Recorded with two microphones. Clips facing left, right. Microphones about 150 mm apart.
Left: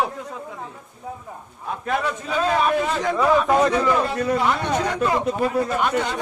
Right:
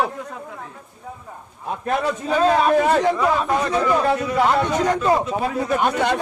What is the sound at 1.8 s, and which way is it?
Speech, 35° right (ahead or behind).